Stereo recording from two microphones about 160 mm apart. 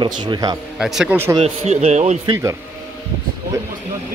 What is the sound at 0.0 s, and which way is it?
Speech, 30° right (ahead or behind).